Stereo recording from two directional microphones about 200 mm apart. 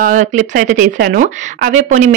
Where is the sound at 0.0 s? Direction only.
40° right (ahead or behind).